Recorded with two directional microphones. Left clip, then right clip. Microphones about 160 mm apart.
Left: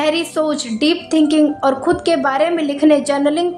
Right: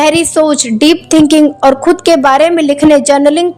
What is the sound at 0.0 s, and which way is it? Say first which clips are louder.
A woman's voice: right 8 dB; 50° right (ahead or behind).